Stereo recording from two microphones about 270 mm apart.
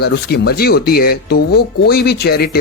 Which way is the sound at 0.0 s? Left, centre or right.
Left.